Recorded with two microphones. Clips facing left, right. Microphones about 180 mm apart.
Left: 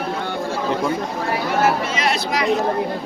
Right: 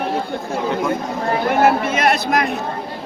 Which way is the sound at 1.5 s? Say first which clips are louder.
Right 4 dB; 55° right (ahead or behind).